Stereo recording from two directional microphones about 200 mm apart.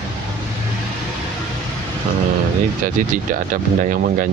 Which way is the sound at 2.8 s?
45° right (ahead or behind).